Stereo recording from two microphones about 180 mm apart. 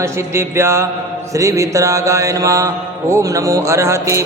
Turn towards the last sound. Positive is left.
turn(degrees=-15)  # may be behind; listen again after turning